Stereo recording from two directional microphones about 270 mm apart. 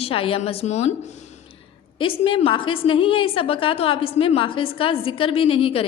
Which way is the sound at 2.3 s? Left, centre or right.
Centre.